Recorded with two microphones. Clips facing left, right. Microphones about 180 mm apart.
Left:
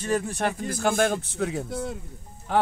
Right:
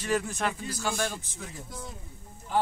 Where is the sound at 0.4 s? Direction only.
50° left (ahead or behind).